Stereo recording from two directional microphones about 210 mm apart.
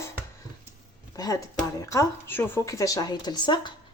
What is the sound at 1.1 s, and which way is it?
Speech, 15° left (ahead or behind).